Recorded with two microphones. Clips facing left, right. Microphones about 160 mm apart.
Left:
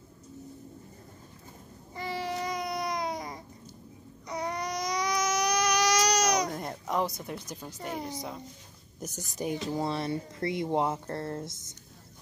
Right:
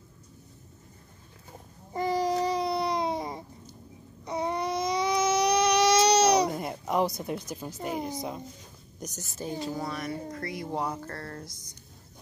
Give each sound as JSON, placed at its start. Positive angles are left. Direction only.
{"t": 2.0, "sound": "a sound", "side_deg": -40}
{"t": 4.3, "sound": "baby cry", "side_deg": -25}
{"t": 6.5, "sound": "a sound", "side_deg": -5}
{"t": 7.4, "sound": "speech", "side_deg": -10}
{"t": 9.0, "sound": "a woman's voice", "side_deg": 15}
{"t": 9.8, "sound": "speech", "side_deg": 30}